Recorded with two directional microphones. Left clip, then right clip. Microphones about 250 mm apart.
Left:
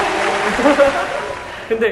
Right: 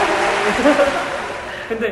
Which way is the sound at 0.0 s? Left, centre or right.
Centre.